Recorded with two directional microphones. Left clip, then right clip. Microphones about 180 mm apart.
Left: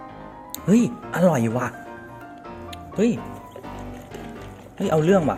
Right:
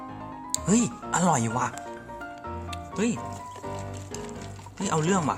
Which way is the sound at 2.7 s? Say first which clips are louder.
Left 7 dB; 30° right (ahead or behind).